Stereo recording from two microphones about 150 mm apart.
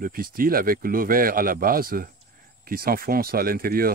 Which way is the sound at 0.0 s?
75° right (ahead or behind).